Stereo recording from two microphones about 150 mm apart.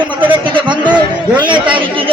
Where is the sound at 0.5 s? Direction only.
30° right (ahead or behind).